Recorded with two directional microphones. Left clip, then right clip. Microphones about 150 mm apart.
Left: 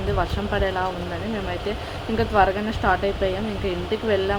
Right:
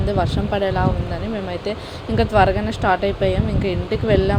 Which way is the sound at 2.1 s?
15° right (ahead or behind).